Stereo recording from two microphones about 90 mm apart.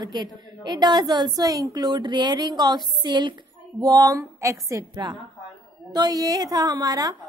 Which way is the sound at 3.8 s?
45° right (ahead or behind).